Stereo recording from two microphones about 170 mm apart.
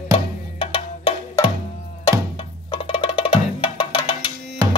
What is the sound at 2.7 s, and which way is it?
Music, 30° left (ahead or behind).